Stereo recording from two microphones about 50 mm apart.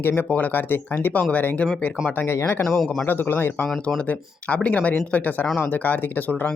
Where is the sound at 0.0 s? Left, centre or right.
Left.